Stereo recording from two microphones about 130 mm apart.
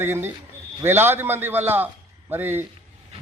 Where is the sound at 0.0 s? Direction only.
15° right (ahead or behind).